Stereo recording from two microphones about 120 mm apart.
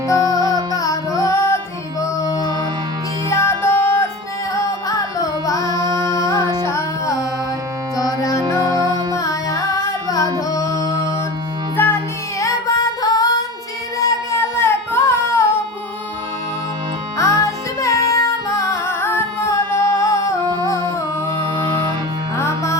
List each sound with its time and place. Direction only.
0.4 s music: 35° right (ahead or behind)
0.8 s music: 25° left (ahead or behind)
3.2 s music: 20° left (ahead or behind)
4.5 s music: 30° left (ahead or behind)
6.3 s music: 35° right (ahead or behind)
6.6 s music: 20° left (ahead or behind)
8.6 s music: 35° right (ahead or behind)
9.1 s carnatic music: 30° left (ahead or behind)
11.8 s music: 20° left (ahead or behind)
12.4 s music: 30° left (ahead or behind)
14.3 s a sound: 20° left (ahead or behind)
17.2 s music: 25° left (ahead or behind)
20.4 s music: 35° right (ahead or behind)
22.4 s music: 25° left (ahead or behind)